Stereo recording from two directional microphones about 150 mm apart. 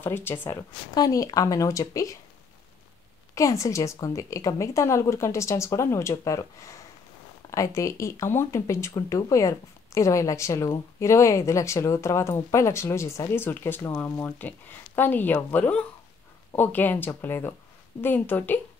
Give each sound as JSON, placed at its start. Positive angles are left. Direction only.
{"t": 0.0, "sound": "speech", "side_deg": 15}
{"t": 3.3, "sound": "speech", "side_deg": 20}